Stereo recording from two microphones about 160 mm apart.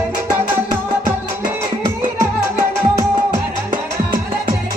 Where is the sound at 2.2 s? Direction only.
15° right (ahead or behind).